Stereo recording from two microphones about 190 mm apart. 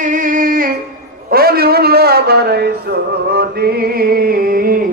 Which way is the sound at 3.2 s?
55° right (ahead or behind).